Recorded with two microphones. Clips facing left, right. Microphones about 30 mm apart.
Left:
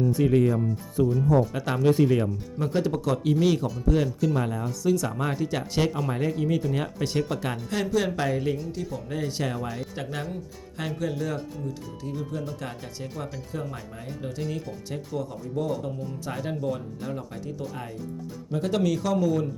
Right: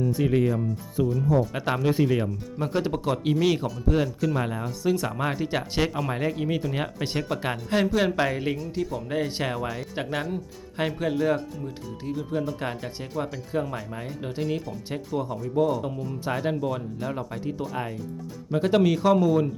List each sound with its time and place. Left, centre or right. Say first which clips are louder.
0.0 s speech: left 2 dB; centre
1.5 s speech: left 2 dB; centre
3.3 s speech: even; centre
9.6 s speech: right 1 dB; centre
9.9 s speech: right 4 dB; right